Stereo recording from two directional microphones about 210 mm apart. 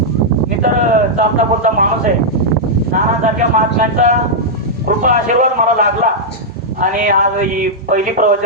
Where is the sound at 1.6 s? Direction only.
40° right (ahead or behind).